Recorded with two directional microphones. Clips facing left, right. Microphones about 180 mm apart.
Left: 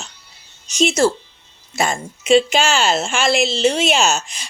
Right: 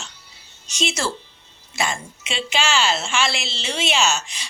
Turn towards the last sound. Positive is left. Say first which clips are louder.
# left 4 dB
turn(degrees=45)  # may be behind; listen again after turning